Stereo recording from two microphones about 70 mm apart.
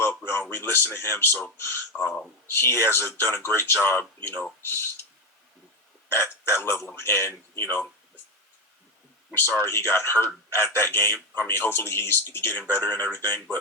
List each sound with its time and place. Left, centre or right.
0.0 s a sound: left
0.5 s a man's voice: left
6.1 s a man's voice: left
9.3 s a man's voice: left